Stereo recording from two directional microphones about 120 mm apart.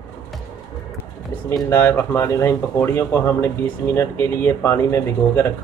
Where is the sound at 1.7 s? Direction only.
20° left (ahead or behind).